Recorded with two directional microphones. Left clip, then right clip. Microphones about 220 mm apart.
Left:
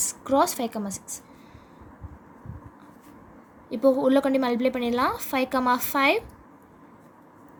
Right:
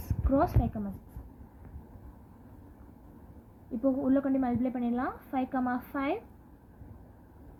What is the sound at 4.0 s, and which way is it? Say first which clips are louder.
A woman's voice: left 7 dB; 55° left (ahead or behind).